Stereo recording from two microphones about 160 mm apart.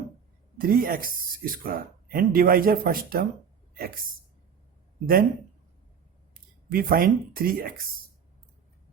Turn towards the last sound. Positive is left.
turn(degrees=-65)  # may be behind; listen again after turning